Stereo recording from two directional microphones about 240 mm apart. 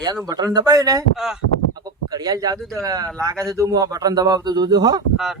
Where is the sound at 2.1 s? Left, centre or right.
Centre.